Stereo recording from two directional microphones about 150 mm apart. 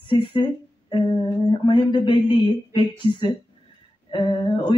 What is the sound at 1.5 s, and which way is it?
Speech, 35° left (ahead or behind).